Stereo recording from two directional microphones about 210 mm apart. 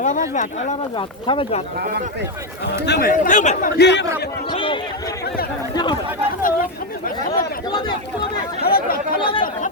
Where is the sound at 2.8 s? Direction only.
55° left (ahead or behind).